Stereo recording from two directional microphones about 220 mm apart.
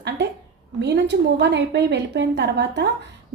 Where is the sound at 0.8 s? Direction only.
50° right (ahead or behind).